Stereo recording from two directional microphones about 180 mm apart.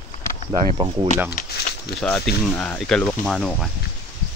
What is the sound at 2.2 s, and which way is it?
Speech, 10° left (ahead or behind).